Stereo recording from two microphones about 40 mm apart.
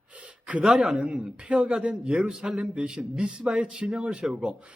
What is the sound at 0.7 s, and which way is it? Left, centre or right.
A man's voice, centre.